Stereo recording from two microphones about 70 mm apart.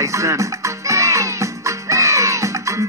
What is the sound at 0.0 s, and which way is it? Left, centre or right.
Speech, right.